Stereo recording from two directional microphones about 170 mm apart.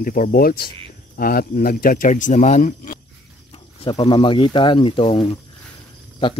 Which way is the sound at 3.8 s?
30° left (ahead or behind).